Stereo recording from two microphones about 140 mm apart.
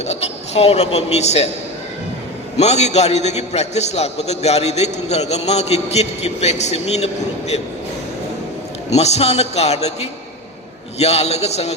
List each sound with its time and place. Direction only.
0.0 s a man's voice: 50° left (ahead or behind)
2.6 s a man's voice: 50° left (ahead or behind)
8.9 s a man's voice: 50° left (ahead or behind)